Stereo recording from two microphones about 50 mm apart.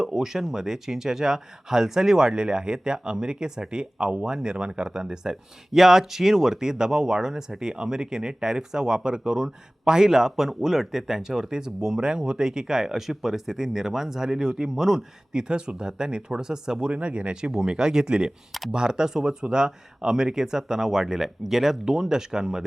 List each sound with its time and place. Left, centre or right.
0.0 s speech: centre
16.9 s speech: right